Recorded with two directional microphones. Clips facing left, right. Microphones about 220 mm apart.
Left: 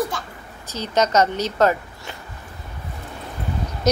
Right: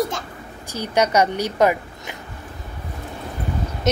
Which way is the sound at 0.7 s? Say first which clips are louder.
Right 1 dB; 10° right (ahead or behind).